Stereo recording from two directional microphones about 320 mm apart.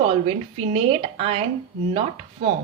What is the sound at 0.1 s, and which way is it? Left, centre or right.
A woman's voice, centre.